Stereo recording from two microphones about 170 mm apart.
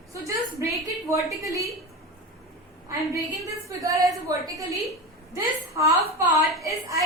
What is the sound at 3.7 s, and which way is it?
A woman's voice, 20° right (ahead or behind).